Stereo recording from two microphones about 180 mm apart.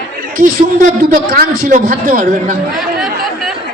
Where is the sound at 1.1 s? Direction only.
50° right (ahead or behind).